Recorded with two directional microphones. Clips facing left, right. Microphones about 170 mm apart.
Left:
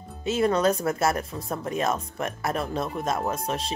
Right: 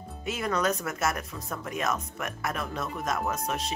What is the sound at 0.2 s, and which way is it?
Speech, 30° left (ahead or behind).